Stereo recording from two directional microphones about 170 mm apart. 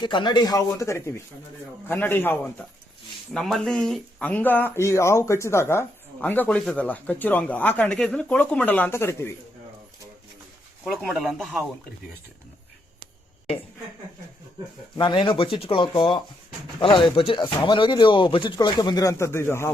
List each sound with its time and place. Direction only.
0.0 s speech: 25° left (ahead or behind)
10.9 s speech: centre (ahead or behind)
14.9 s speech: 30° left (ahead or behind)